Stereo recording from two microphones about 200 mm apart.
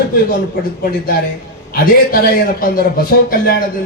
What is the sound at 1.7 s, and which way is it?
A man's voice, 50° left (ahead or behind).